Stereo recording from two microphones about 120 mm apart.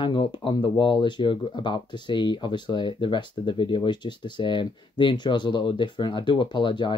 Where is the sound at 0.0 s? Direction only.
45° left (ahead or behind).